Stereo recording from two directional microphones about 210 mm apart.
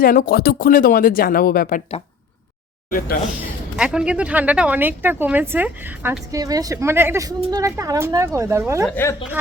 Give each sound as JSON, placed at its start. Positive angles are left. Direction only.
{"t": 0.0, "sound": "speech", "side_deg": 40}
{"t": 3.8, "sound": "speech", "side_deg": -5}
{"t": 8.9, "sound": "speech", "side_deg": 10}